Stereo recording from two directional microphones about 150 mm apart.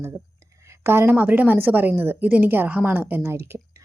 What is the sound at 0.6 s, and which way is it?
A woman's voice, 15° right (ahead or behind).